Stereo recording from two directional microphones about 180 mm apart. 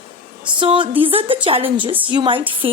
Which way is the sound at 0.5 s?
30° right (ahead or behind).